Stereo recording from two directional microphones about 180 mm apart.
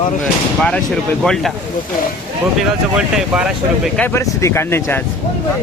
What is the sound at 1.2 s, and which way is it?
Speech, centre (ahead or behind).